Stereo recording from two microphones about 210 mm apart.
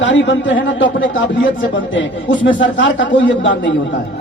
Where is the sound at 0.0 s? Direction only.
60° left (ahead or behind).